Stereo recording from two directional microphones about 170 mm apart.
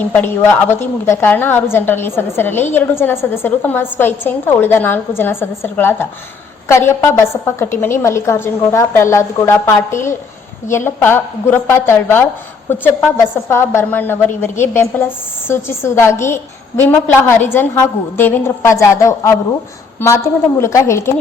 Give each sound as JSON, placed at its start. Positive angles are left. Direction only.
{"t": 0.0, "sound": "a woman's voice", "side_deg": 10}